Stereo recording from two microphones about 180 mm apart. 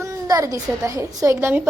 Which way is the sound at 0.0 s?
20° right (ahead or behind).